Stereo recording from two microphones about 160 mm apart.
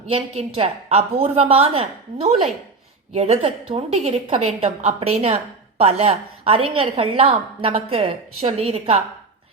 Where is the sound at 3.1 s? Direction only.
40° right (ahead or behind).